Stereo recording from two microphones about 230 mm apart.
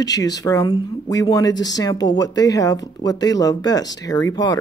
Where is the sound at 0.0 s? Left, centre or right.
Centre.